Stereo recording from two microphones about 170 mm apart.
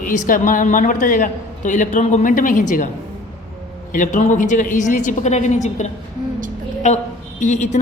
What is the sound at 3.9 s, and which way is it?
A woman's voice, 50° left (ahead or behind).